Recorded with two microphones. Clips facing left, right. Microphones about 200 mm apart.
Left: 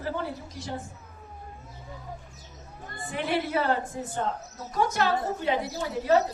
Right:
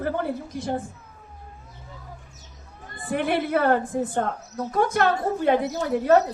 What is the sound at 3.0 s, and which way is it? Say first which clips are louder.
A woman's voice: right 5 dB; 55° right (ahead or behind).